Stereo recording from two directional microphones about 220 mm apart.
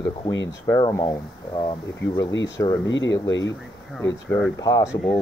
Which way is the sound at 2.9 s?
55° left (ahead or behind).